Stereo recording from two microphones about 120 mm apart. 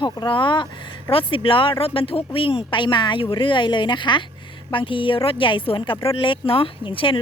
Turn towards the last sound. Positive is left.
turn(degrees=45)  # may be behind; listen again after turning